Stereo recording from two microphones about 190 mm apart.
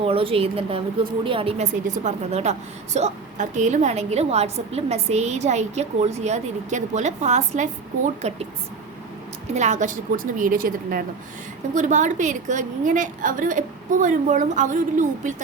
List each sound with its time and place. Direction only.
0.0 s a woman's voice: 30° right (ahead or behind)
9.6 s a woman's voice: 40° right (ahead or behind)